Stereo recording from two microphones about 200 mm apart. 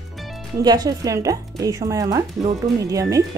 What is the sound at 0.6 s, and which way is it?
Speech, 20° right (ahead or behind).